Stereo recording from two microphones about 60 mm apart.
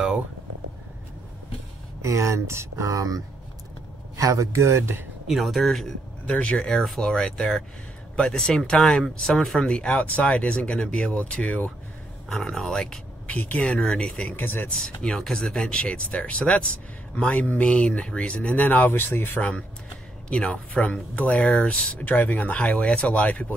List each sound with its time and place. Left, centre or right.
2.0 s speech: right
2.7 s speech: right
4.2 s speech: right
5.3 s speech: centre
6.2 s speech: centre
9.7 s speech: centre
12.3 s speech: centre
13.3 s speech: left
13.7 s speech: centre
14.3 s speech: left
14.7 s speech: centre; by 19.6 s left
20.2 s speech: centre